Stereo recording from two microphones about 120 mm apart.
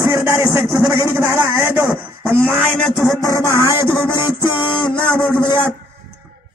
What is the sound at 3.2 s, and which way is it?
Music, 25° left (ahead or behind).